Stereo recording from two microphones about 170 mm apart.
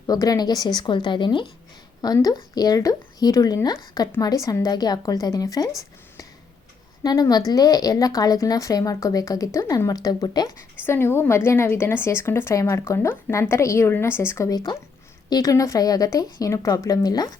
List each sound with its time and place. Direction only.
0.1 s a woman's voice: 20° left (ahead or behind)
7.0 s a woman's voice: 20° left (ahead or behind)